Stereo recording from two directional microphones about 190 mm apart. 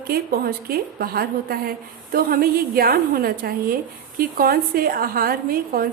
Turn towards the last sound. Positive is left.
turn(degrees=-50)  # may be behind; listen again after turning